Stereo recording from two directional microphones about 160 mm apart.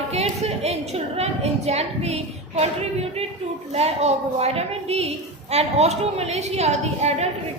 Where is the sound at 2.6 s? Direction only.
40° right (ahead or behind).